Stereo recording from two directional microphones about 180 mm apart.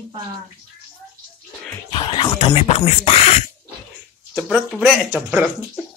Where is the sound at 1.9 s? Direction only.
25° left (ahead or behind).